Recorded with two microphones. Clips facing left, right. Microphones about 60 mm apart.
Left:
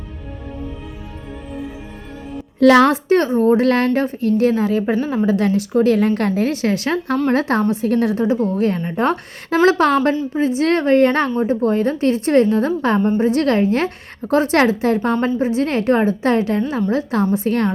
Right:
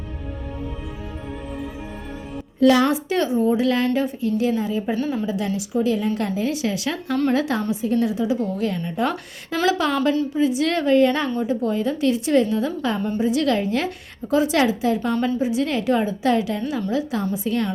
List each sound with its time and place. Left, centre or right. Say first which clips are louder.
2.6 s a child's voice: left 5 dB; left
3.1 s a woman's voice: left 6 dB; left
4.9 s a woman's voice: left 4 dB; left
5.2 s a woman's voice: left 8 dB; left
7.7 s a woman's voice: left 4 dB; left
16.9 s a woman's voice: left 6 dB; left